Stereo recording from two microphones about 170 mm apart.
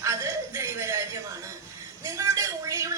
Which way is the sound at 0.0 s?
15° right (ahead or behind).